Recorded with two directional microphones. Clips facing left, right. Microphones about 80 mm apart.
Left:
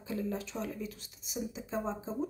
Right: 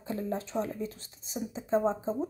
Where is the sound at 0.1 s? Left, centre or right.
Right.